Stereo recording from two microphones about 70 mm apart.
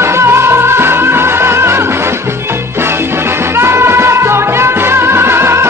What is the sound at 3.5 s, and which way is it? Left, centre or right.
Music, right.